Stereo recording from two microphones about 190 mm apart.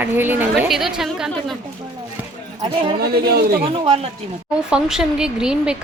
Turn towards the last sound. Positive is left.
turn(degrees=-5)  # may be behind; listen again after turning